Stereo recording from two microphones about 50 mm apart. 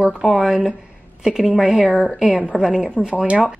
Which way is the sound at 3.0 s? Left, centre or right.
Centre.